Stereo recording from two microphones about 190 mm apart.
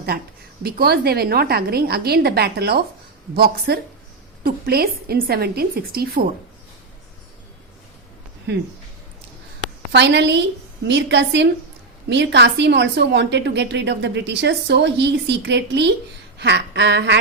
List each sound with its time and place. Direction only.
0.6 s a woman's voice: 55° right (ahead or behind)
9.9 s a woman's voice: 65° right (ahead or behind)